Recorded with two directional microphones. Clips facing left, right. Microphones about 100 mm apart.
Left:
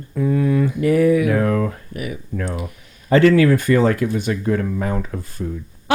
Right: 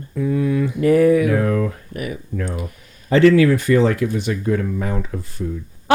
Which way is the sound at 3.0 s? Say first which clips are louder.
Even; 45° left (ahead or behind).